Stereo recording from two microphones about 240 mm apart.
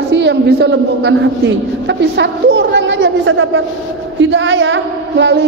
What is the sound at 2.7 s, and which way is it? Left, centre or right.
A woman's voice, right.